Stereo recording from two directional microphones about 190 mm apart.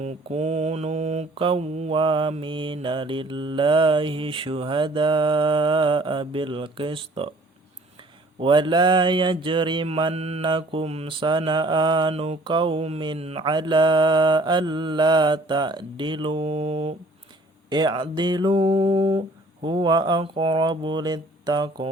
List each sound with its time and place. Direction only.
0.0 s mantra: 35° right (ahead or behind)
8.4 s mantra: 25° right (ahead or behind)